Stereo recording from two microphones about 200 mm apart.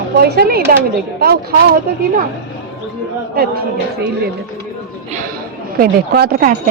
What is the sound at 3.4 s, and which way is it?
Speech, 50° right (ahead or behind).